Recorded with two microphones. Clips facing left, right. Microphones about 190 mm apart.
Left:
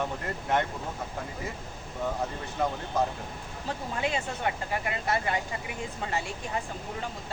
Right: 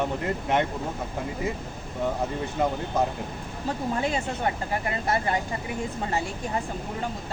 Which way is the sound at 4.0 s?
40° right (ahead or behind).